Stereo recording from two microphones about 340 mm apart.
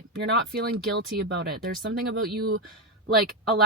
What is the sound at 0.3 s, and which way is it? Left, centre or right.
Speech, right.